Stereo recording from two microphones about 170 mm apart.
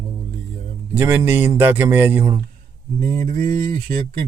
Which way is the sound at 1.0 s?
10° right (ahead or behind).